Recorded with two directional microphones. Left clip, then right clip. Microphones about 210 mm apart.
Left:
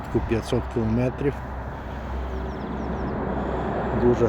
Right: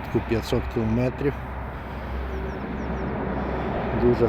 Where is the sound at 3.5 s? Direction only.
45° right (ahead or behind).